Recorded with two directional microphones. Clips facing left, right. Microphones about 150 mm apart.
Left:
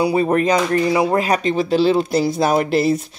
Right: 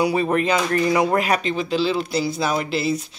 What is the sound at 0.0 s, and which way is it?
Speech, 35° left (ahead or behind).